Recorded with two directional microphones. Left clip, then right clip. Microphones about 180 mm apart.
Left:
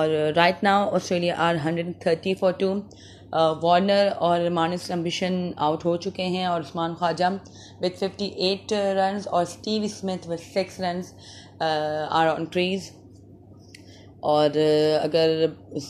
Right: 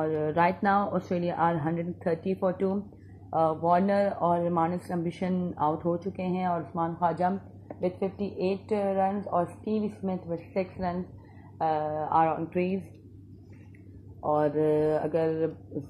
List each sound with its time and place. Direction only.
0.0 s speech: 30° left (ahead or behind)
2.1 s speech: 20° left (ahead or behind)
8.6 s speech: 30° left (ahead or behind)
14.2 s speech: 35° left (ahead or behind)